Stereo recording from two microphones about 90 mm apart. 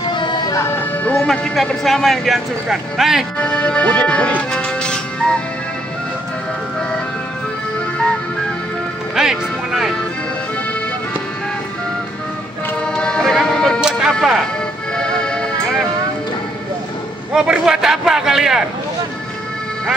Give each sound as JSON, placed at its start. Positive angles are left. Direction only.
{"t": 0.1, "sound": "vehicle", "side_deg": 60}
{"t": 0.5, "sound": "music", "side_deg": 30}
{"t": 1.1, "sound": "speech", "side_deg": 10}
{"t": 3.3, "sound": "speech", "side_deg": 10}
{"t": 9.1, "sound": "music", "side_deg": -5}
{"t": 12.8, "sound": "music", "side_deg": 10}
{"t": 13.7, "sound": "a sound", "side_deg": -5}
{"t": 15.0, "sound": "music", "side_deg": 10}
{"t": 17.3, "sound": "speech", "side_deg": -10}